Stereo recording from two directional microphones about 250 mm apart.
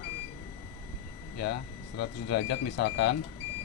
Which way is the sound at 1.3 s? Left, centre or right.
Left.